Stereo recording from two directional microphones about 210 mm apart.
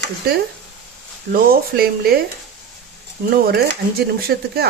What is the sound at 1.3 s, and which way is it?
Speech, 45° right (ahead or behind).